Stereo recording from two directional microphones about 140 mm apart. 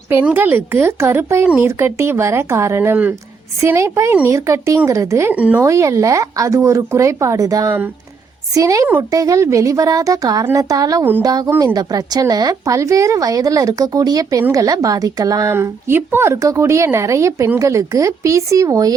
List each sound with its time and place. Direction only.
0.1 s speech: 15° right (ahead or behind)
5.6 s speech: 20° right (ahead or behind)